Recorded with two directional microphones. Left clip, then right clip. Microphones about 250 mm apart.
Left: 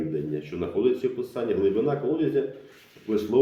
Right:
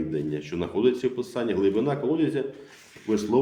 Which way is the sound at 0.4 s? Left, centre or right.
Right.